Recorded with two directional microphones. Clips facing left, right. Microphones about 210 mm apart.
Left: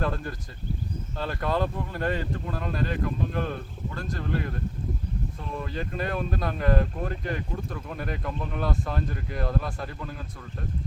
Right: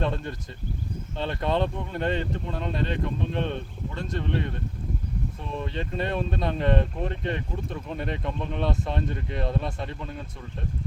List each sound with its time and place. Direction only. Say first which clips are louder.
0.0 s speech: right 1 dB; 25° right (ahead or behind)
5.7 s speech: right 1 dB; 25° right (ahead or behind)